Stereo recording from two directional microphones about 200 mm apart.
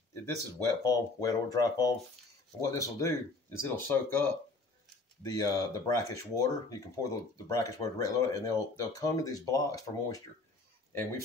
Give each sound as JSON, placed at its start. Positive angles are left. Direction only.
{"t": 0.8, "sound": "speech", "side_deg": 20}